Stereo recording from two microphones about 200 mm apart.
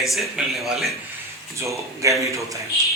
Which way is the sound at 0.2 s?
Centre (ahead or behind).